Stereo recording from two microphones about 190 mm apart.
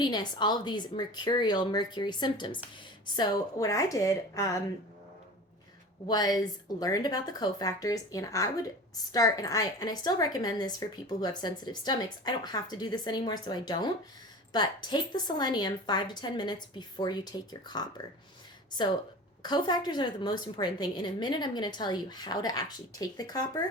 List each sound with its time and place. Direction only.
0.0 s a woman's voice: 20° left (ahead or behind)
6.1 s a woman's voice: 20° left (ahead or behind)
19.4 s a woman's voice: 20° left (ahead or behind)